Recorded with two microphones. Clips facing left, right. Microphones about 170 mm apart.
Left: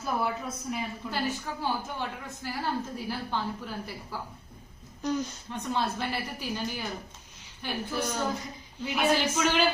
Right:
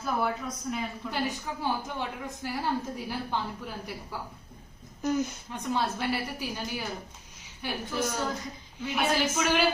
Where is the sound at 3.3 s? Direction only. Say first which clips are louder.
Even; 15° right (ahead or behind).